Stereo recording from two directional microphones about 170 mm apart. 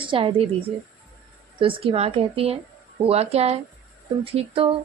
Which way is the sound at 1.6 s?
30° right (ahead or behind).